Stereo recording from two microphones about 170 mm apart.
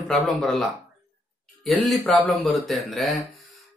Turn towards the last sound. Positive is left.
turn(degrees=0)  # may be behind; listen again after turning